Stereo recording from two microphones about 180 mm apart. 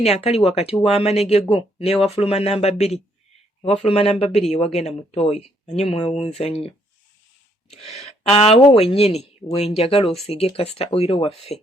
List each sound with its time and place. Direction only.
0.0 s speech: 35° left (ahead or behind)
7.7 s speech: 35° left (ahead or behind)